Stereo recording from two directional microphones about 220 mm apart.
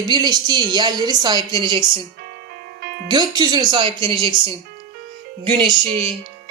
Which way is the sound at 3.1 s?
20° right (ahead or behind).